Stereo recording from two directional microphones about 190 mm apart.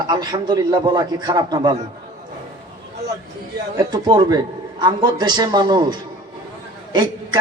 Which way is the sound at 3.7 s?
20° right (ahead or behind).